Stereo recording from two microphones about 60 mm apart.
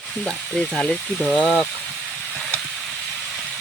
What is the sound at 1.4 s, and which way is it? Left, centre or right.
Speech, centre.